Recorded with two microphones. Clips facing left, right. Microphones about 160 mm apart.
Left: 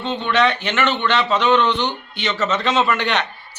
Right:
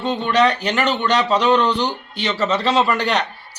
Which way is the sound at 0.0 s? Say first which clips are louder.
Right 2 dB; 40° right (ahead or behind).